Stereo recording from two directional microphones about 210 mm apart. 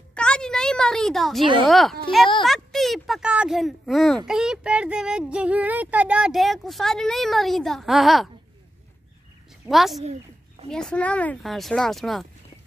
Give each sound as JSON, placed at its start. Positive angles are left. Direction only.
{"t": 0.1, "sound": "a sound", "side_deg": 5}
{"t": 1.4, "sound": "a woman's voice", "side_deg": -25}
{"t": 1.7, "sound": "speech", "side_deg": 0}
{"t": 9.7, "sound": "speech", "side_deg": 0}